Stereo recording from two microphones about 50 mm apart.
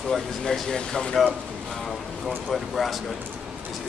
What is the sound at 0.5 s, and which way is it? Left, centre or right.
Speech, centre.